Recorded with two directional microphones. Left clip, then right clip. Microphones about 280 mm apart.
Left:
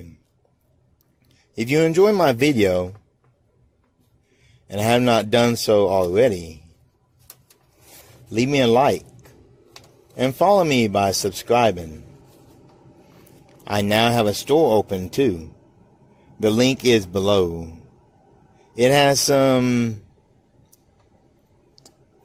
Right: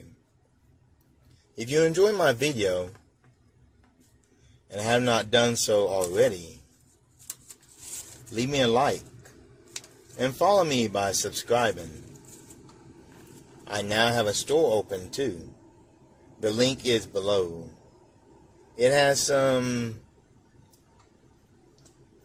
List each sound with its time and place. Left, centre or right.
1.7 s speech: left
4.7 s speech: left
8.4 s speech: left
10.2 s speech: left
13.7 s speech: left
16.4 s speech: left
18.8 s speech: left